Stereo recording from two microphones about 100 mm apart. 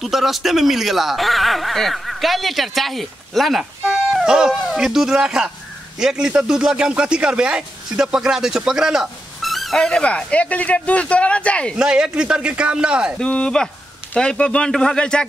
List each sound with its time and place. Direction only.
0.0 s a man's voice: centre (ahead or behind)
11.7 s speech: 5° right (ahead or behind)
13.2 s speech: 10° left (ahead or behind)